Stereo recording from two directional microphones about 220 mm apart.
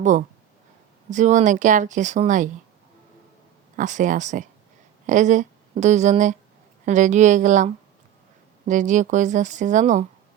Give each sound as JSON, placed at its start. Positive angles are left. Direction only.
{"t": 0.0, "sound": "speech", "side_deg": -35}
{"t": 3.8, "sound": "speech", "side_deg": -35}